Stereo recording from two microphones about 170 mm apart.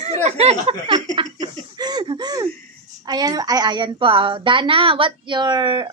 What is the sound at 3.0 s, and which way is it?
Speech, 25° right (ahead or behind).